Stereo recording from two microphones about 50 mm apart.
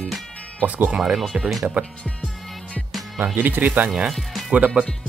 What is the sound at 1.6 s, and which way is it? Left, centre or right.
Speech, right.